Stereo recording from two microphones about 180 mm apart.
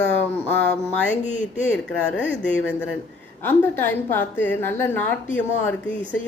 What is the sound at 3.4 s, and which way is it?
A woman's voice, 10° left (ahead or behind).